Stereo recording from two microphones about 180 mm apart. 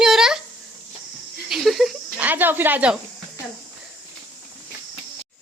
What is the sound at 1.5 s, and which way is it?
Speech, centre (ahead or behind).